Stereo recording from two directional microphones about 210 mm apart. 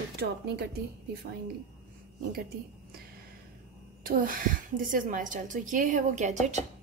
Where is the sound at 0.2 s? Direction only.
55° right (ahead or behind).